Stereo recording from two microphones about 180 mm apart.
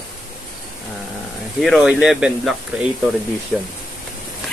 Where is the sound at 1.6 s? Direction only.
Centre (ahead or behind).